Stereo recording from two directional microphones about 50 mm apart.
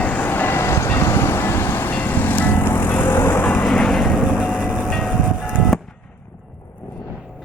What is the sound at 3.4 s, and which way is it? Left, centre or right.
Vehicle, left.